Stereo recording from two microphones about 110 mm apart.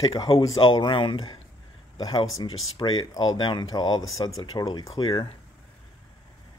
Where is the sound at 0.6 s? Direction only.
45° left (ahead or behind).